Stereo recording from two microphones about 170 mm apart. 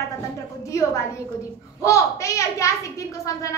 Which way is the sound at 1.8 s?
20° left (ahead or behind).